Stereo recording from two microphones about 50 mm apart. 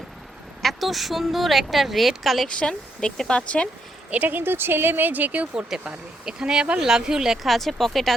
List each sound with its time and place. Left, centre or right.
0.6 s speech: centre
2.5 s a woman's voice: centre
4.1 s speech: right
5.5 s speech: centre
7.4 s speech: centre